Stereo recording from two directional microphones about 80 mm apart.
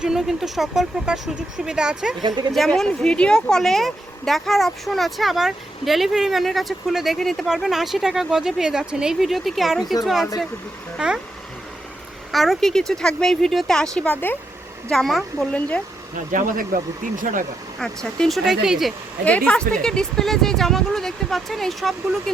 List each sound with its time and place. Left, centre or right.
0.0 s speech: centre
2.2 s speech: right
2.5 s speech: centre
12.3 s speech: centre
14.1 s speech: left
14.8 s speech: centre
17.7 s speech: centre
19.2 s speech: centre